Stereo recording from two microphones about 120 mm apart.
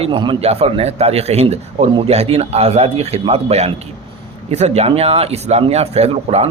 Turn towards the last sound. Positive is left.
turn(degrees=-60)  # may be behind; listen again after turning